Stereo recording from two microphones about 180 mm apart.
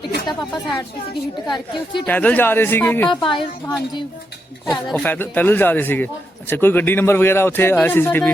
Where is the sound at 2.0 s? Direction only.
10° left (ahead or behind).